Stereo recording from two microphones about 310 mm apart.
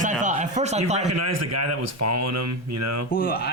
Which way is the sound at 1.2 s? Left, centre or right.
Right.